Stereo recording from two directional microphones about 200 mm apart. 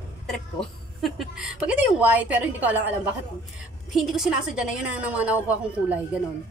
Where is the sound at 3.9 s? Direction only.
Centre (ahead or behind).